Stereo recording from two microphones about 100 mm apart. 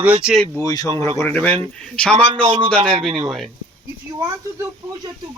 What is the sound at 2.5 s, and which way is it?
Speech, 90° right.